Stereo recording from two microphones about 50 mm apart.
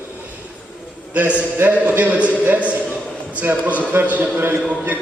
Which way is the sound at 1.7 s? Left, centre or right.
Right.